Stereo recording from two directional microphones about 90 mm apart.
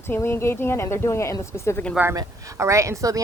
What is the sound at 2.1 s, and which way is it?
A woman's voice, 35° right (ahead or behind).